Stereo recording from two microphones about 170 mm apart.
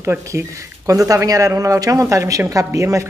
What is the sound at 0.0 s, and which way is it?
Speech, 15° right (ahead or behind).